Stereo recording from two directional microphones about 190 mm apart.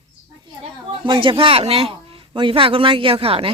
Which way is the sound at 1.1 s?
25° right (ahead or behind).